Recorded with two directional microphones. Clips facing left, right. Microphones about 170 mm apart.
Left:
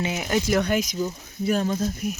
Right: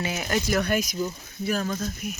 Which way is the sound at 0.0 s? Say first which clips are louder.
Left 2 dB; 20° left (ahead or behind).